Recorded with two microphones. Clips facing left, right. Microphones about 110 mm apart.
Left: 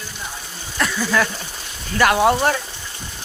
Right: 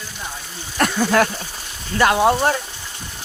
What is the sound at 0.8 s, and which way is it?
Speech, 50° right (ahead or behind).